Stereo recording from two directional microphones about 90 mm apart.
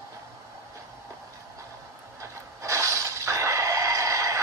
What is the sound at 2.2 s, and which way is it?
Neigh, 35° right (ahead or behind).